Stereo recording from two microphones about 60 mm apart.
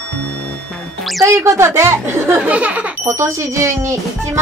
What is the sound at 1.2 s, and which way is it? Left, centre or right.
Speech, right.